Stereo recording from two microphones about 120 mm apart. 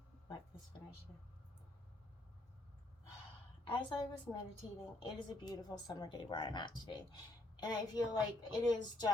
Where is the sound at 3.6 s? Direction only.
45° left (ahead or behind).